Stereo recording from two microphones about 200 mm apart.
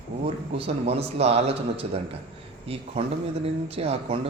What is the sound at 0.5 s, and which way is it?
A man's voice, 30° right (ahead or behind).